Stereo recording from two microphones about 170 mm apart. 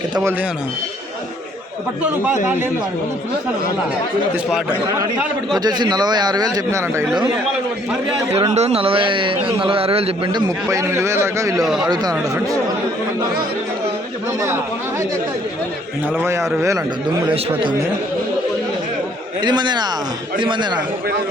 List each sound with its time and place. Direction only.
5.5 s a man's voice: 25° right (ahead or behind)
8.5 s speech: 35° right (ahead or behind)
10.4 s a man's voice: 20° right (ahead or behind)
11.6 s speech: centre (ahead or behind)
11.9 s a man's voice: 20° right (ahead or behind)
16.1 s a man's voice: 15° right (ahead or behind)
19.4 s a man's voice: 25° right (ahead or behind)